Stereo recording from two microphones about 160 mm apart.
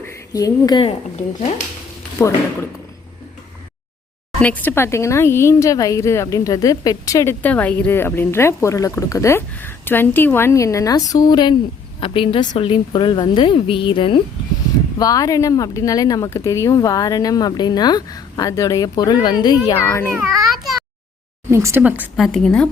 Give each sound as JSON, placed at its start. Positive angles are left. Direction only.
{"t": 0.0, "sound": "a sound", "side_deg": 20}
{"t": 2.2, "sound": "speech", "side_deg": 15}
{"t": 4.4, "sound": "speech", "side_deg": 10}
{"t": 7.4, "sound": "speech", "side_deg": 10}
{"t": 19.8, "sound": "speech", "side_deg": 15}
{"t": 20.1, "sound": "speech", "side_deg": -15}
{"t": 21.5, "sound": "speech", "side_deg": -15}
{"t": 22.2, "sound": "speech", "side_deg": 0}